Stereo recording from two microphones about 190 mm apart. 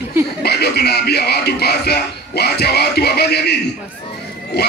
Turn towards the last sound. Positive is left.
turn(degrees=60)  # may be behind; listen again after turning